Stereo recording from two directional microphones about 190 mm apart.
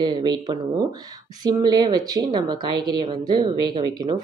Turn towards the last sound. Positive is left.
turn(degrees=-25)  # may be behind; listen again after turning